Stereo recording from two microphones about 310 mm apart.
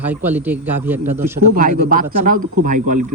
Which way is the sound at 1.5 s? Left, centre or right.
Right.